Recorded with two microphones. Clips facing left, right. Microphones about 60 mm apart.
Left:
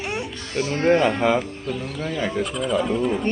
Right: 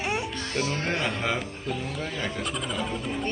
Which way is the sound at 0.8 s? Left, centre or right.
Centre.